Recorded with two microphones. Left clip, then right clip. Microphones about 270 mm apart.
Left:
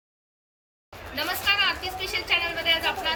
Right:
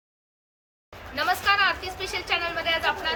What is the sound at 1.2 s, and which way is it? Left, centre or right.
A woman's voice, centre.